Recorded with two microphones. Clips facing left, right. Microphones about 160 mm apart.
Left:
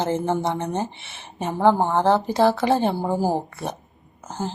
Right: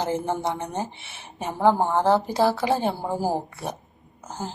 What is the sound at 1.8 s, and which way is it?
Speech, 20° left (ahead or behind).